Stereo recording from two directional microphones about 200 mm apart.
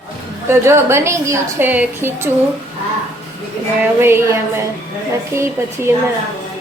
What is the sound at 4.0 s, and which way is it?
A woman's voice, 10° right (ahead or behind).